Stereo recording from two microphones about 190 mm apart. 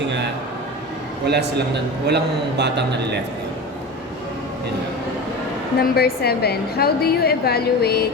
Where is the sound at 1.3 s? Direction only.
60° right (ahead or behind).